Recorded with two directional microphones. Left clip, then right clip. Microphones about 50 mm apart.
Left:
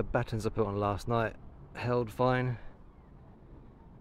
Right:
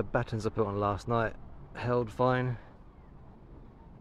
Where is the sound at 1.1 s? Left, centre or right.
Left.